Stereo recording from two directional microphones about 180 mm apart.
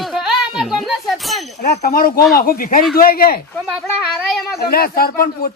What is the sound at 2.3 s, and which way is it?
Speech, 55° left (ahead or behind).